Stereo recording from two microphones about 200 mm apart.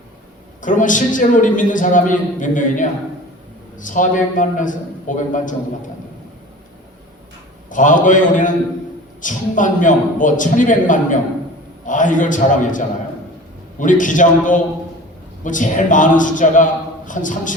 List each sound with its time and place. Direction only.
0.6 s a man's voice: 40° left (ahead or behind)
7.7 s a man's voice: 40° left (ahead or behind)